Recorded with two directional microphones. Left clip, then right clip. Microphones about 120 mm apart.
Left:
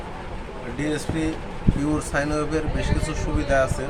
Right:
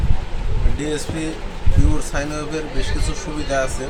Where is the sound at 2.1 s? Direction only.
30° left (ahead or behind).